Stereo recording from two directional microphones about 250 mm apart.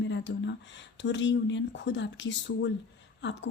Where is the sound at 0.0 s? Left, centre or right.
Left.